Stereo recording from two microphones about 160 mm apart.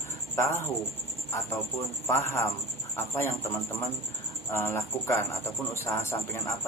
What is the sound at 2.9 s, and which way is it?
Speech, 15° left (ahead or behind).